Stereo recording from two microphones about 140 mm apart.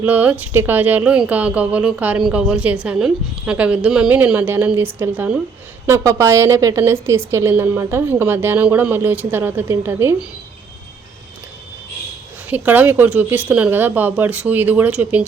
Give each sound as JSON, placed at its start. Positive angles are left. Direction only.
{"t": 0.0, "sound": "a woman's voice", "side_deg": -10}
{"t": 12.5, "sound": "a woman's voice", "side_deg": -10}